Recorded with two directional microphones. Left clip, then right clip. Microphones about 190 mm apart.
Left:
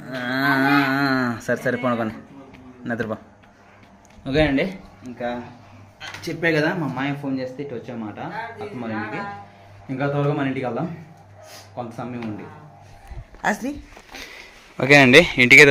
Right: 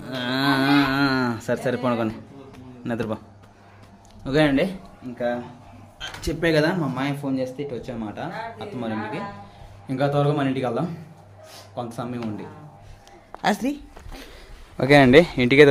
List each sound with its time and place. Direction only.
0.0 s livestock: 20° right (ahead or behind)
2.8 s speech: 15° right (ahead or behind)
4.2 s speech: 15° right (ahead or behind)
6.2 s speech: 10° right (ahead or behind)
13.4 s speech: 25° right (ahead or behind); by 15.7 s 5° right (ahead or behind)